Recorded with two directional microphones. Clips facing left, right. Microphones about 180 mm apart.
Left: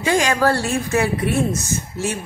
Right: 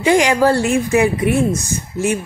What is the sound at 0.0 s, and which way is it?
Speech, 20° right (ahead or behind).